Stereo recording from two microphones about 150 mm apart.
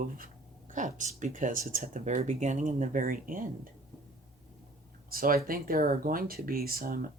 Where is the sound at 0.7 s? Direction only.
55° right (ahead or behind).